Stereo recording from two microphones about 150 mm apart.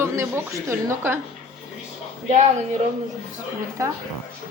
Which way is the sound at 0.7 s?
15° right (ahead or behind).